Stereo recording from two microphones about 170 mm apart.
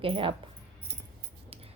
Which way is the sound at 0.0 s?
30° right (ahead or behind).